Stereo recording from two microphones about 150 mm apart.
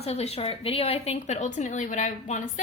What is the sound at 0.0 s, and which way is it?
Speech, 45° left (ahead or behind).